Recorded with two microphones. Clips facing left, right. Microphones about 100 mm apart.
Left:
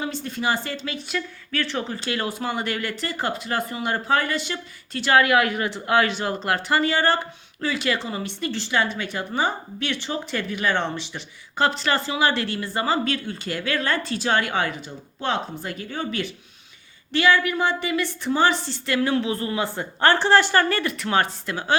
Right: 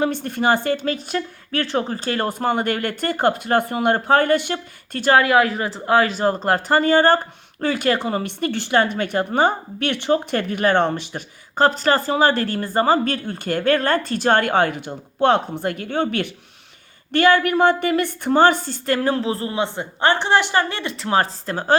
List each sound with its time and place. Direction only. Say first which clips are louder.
0.0 s a woman's voice: right 6 dB; 55° right (ahead or behind)
5.1 s a woman's voice: right 2 dB; 30° right (ahead or behind); by 16.3 s 60° right (ahead or behind)
17.1 s a woman's voice: right 4 dB; 50° right (ahead or behind)